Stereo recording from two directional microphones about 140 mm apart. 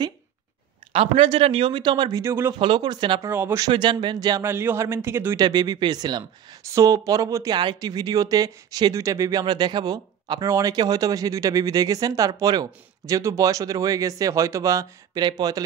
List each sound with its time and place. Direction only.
0.9 s speech: 45° right (ahead or behind); by 2.5 s 20° right (ahead or behind)
2.6 s speech: 35° right (ahead or behind)
3.3 s speech: 15° right (ahead or behind)
3.6 s speech: 35° right (ahead or behind)
4.5 s speech: 15° right (ahead or behind)